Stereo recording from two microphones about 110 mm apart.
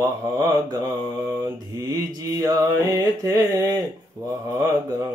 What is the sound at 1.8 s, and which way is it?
Mantra, 35° right (ahead or behind).